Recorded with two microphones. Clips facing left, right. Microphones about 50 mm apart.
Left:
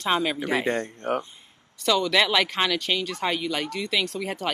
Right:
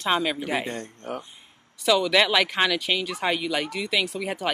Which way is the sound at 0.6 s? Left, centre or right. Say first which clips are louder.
Left 7 dB; left.